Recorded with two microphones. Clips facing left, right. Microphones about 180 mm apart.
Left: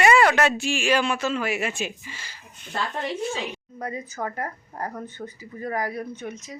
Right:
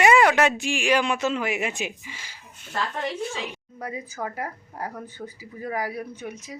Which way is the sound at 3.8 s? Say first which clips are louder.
Left 1 dB; 5° right (ahead or behind).